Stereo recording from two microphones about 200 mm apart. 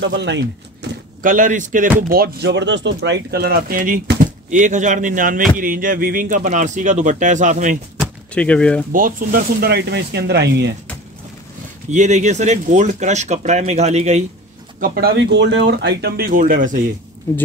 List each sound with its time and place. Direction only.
0.0 s speech: 60° right (ahead or behind)
1.2 s speech: 40° right (ahead or behind)
8.0 s a sound: 5° left (ahead or behind)
8.9 s speech: 45° right (ahead or behind)
11.9 s speech: 35° right (ahead or behind)
14.8 s speech: 50° right (ahead or behind)